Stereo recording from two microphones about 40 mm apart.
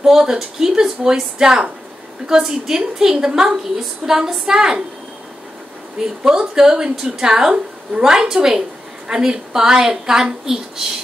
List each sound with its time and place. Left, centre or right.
0.0 s a woman's voice: centre
6.2 s a woman's voice: centre